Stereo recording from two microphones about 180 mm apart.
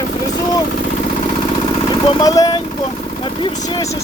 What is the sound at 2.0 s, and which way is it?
Speech, 25° left (ahead or behind).